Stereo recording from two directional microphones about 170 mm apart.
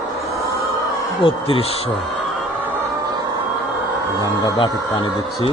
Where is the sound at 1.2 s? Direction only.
35° left (ahead or behind).